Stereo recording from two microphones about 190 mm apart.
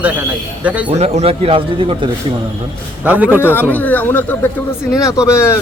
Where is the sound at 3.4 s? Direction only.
10° left (ahead or behind).